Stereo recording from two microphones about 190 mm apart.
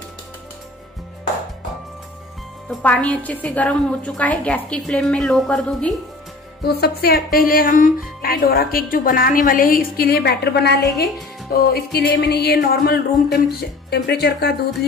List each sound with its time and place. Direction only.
2.7 s a woman's voice: 5° left (ahead or behind)
6.6 s speech: 55° left (ahead or behind)
11.7 s music: 55° left (ahead or behind)